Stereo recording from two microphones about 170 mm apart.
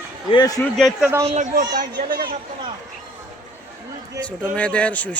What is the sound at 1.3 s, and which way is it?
Speech, 45° right (ahead or behind).